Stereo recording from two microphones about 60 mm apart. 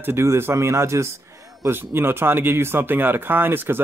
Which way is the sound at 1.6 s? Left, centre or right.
Right.